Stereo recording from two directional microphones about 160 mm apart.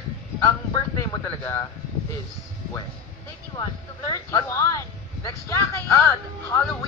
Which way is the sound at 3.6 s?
20° left (ahead or behind).